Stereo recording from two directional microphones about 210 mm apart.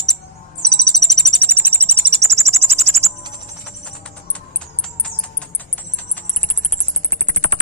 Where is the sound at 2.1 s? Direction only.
30° right (ahead or behind).